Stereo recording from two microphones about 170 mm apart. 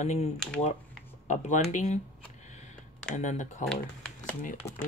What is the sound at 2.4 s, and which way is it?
Computer keyboard, 45° left (ahead or behind).